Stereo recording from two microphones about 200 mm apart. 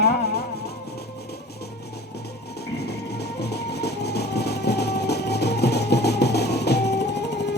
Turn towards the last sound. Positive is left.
turn(degrees=60)  # may be behind; listen again after turning